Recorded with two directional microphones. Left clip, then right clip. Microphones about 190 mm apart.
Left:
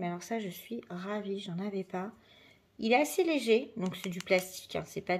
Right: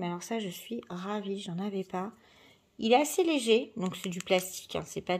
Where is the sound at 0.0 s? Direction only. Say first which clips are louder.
Right 1 dB; 30° right (ahead or behind).